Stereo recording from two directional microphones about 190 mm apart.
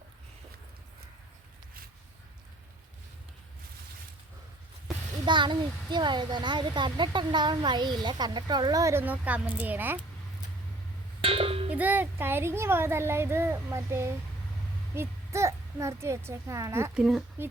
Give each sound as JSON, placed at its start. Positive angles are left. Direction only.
{"t": 5.2, "sound": "a child's voice", "side_deg": -25}
{"t": 11.2, "sound": "cowbell", "side_deg": -30}
{"t": 11.7, "sound": "a child's voice", "side_deg": -10}